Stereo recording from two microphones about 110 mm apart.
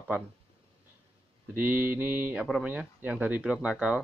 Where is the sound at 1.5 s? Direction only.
15° right (ahead or behind).